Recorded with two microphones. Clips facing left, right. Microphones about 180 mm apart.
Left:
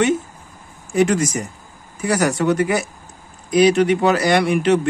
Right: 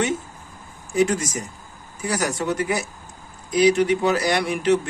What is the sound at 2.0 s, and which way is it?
A man's voice, 65° left (ahead or behind).